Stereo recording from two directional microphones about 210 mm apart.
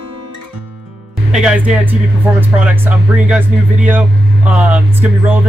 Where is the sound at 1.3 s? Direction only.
5° right (ahead or behind).